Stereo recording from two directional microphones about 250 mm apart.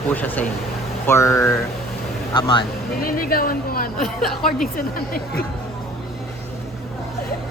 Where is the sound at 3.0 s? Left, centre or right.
Left.